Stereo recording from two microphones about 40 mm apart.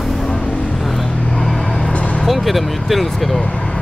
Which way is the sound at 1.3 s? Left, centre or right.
Centre.